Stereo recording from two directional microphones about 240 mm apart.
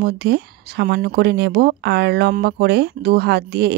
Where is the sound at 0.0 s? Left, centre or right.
Right.